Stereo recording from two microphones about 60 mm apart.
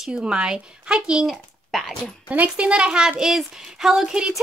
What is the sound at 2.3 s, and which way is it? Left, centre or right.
Speech, right.